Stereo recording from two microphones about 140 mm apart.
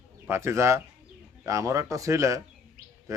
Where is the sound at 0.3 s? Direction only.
20° right (ahead or behind).